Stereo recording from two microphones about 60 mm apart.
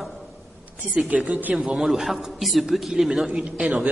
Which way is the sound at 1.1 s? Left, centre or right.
Right.